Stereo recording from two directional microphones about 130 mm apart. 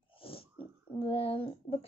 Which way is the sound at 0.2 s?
45° left (ahead or behind).